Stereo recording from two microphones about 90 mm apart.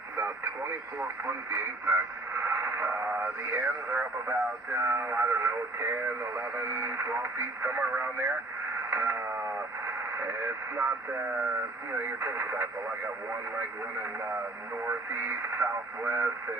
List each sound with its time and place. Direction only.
0.2 s speech: 25° right (ahead or behind)
8.9 s a sound: 25° right (ahead or behind)
9.8 s speech: 25° right (ahead or behind)
14.8 s speech: 25° right (ahead or behind)